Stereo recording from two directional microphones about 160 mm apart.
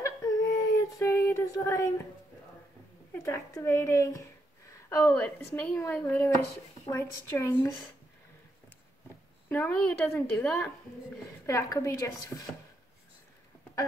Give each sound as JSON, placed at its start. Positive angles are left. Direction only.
{"t": 0.0, "sound": "a sound", "side_deg": 20}
{"t": 3.2, "sound": "a woman's voice", "side_deg": 20}
{"t": 9.5, "sound": "a woman's voice", "side_deg": 10}
{"t": 11.4, "sound": "speech", "side_deg": 20}